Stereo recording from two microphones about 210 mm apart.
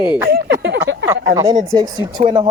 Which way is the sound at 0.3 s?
50° right (ahead or behind).